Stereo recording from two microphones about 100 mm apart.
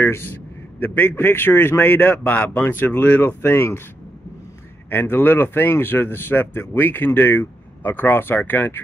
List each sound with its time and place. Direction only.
0.0 s a man's voice: 20° left (ahead or behind)
4.8 s a man's voice: 20° left (ahead or behind)